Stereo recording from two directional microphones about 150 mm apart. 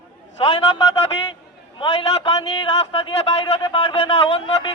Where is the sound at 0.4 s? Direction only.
35° left (ahead or behind).